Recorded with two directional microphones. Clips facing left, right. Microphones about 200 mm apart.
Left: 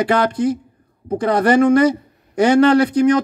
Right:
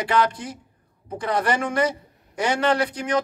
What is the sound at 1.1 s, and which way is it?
Speech, 40° left (ahead or behind).